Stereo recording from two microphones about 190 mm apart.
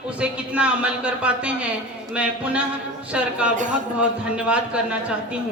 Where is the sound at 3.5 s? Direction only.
40° right (ahead or behind).